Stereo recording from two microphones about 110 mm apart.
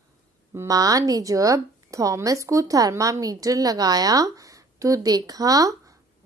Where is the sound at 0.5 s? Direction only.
35° right (ahead or behind).